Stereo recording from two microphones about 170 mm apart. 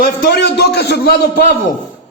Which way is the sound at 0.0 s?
75° left (ahead or behind).